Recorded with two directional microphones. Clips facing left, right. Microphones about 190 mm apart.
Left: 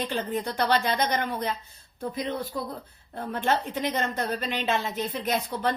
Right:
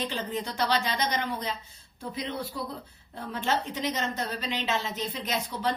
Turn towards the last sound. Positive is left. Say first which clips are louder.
# left 4 dB
turn(degrees=55)  # may be behind; listen again after turning